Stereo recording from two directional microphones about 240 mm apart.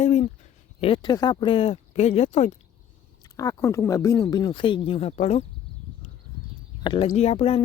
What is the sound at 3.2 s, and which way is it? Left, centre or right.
Speech, centre.